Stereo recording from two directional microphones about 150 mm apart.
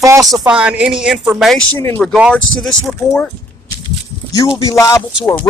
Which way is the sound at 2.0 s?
5° right (ahead or behind).